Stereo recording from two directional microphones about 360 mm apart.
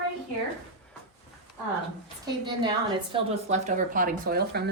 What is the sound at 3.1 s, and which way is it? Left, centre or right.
Speech, centre.